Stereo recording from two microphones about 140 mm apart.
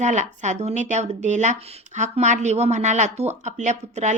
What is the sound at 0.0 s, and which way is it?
A woman's voice, 60° right (ahead or behind).